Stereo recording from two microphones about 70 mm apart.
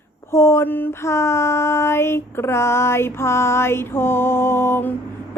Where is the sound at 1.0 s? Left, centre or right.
Left.